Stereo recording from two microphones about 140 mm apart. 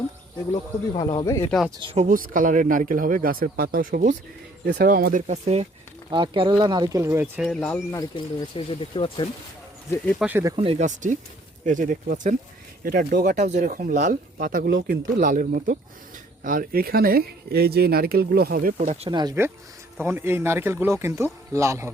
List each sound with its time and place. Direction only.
0.9 s speech: 30° left (ahead or behind)
2.0 s speech: 70° right (ahead or behind); by 5.2 s 90° right
5.2 s speech: 50° right (ahead or behind)
6.1 s speech: 35° right (ahead or behind)
7.3 s speech: centre (ahead or behind)
7.6 s speech: 10° left (ahead or behind)
7.9 s speech: 25° left (ahead or behind)
8.5 s speech: 40° left (ahead or behind)
10.2 s speech: 10° right (ahead or behind)
10.8 s speech: 60° right (ahead or behind)
12.8 s speech: 90° right
18.9 s speech: 45° right (ahead or behind)
19.1 s speech: 25° right (ahead or behind)